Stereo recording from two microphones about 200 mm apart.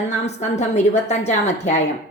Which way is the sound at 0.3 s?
35° left (ahead or behind).